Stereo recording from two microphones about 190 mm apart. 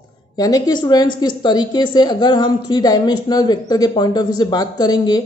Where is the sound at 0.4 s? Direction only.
20° left (ahead or behind).